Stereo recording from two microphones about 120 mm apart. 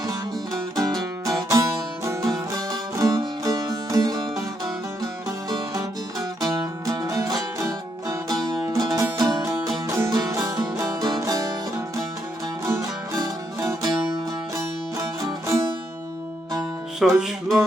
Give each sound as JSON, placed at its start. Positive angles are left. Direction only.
{"t": 0.8, "sound": "music", "side_deg": -30}
{"t": 12.6, "sound": "music", "side_deg": -25}
{"t": 17.0, "sound": "music", "side_deg": 0}